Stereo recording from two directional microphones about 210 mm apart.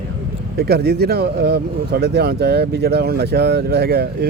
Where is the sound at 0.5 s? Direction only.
50° right (ahead or behind).